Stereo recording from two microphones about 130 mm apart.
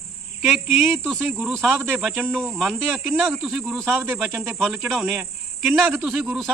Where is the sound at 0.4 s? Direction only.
15° right (ahead or behind).